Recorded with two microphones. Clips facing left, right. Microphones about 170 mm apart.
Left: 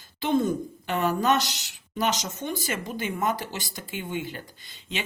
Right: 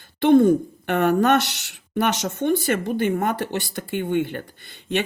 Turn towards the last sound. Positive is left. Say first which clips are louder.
# right 11 dB
turn(degrees=-60)  # may be behind; listen again after turning